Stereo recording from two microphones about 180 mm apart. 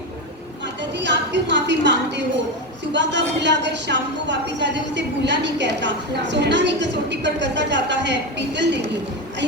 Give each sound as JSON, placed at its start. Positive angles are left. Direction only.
{"t": 0.8, "sound": "a woman's voice", "side_deg": -80}